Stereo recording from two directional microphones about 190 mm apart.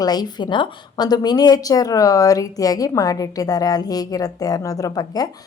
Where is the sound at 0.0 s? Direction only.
20° left (ahead or behind).